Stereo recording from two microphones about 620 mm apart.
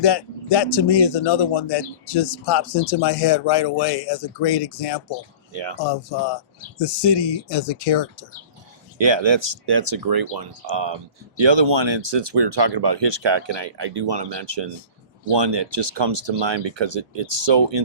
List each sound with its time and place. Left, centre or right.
0.0 s speech: left
9.0 s speech: right